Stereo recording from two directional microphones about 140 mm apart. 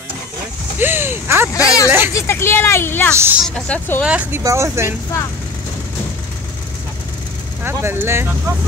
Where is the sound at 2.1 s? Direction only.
15° left (ahead or behind).